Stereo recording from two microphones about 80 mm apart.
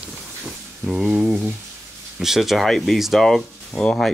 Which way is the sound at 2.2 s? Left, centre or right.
Centre.